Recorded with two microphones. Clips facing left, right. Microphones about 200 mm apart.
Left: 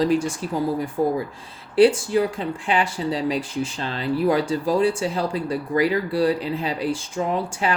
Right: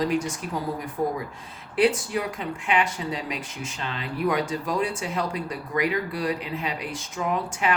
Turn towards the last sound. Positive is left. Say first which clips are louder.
# left 3 dB
turn(degrees=30)  # may be behind; listen again after turning